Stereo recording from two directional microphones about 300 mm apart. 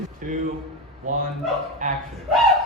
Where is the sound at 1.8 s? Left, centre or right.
Right.